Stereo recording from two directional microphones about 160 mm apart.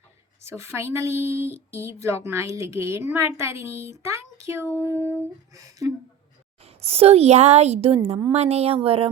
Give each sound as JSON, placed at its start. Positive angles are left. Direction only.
{"t": 0.4, "sound": "speech", "side_deg": -15}
{"t": 6.7, "sound": "a woman's voice", "side_deg": -40}